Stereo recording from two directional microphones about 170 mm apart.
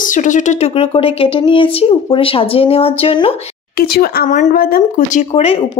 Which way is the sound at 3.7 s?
65° left (ahead or behind).